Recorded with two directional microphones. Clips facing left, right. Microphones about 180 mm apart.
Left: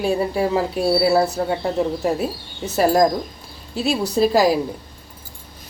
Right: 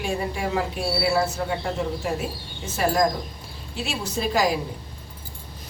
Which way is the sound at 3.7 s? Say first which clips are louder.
Left 8 dB; 40° left (ahead or behind).